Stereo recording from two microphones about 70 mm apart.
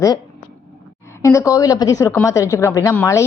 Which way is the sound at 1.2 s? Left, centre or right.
Left.